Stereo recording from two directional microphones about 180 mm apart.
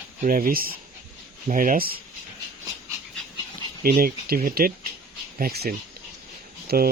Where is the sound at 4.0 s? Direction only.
55° right (ahead or behind).